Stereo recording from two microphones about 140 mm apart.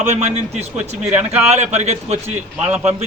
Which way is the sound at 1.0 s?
10° right (ahead or behind).